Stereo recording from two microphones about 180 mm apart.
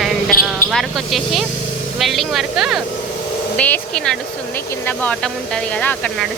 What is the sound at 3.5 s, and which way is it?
Speech, 10° left (ahead or behind).